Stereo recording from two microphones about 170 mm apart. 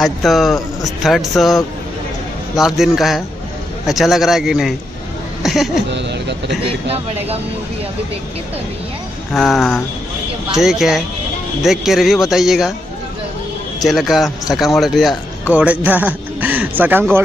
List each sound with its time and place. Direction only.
0.0 s a man's voice: centre (ahead or behind)
5.9 s speech: 90° right
6.6 s speech: 35° right (ahead or behind)
9.3 s a man's voice: centre (ahead or behind)
13.7 s speech: centre (ahead or behind)